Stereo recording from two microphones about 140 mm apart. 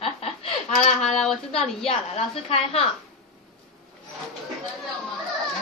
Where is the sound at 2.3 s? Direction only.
40° left (ahead or behind).